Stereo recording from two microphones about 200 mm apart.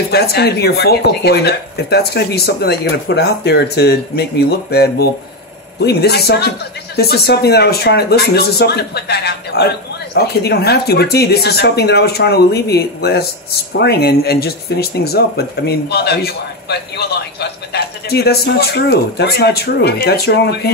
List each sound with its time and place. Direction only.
0.1 s speech: 55° left (ahead or behind)